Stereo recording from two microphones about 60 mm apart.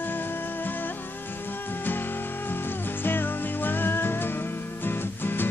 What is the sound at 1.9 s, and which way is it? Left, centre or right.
Music, left.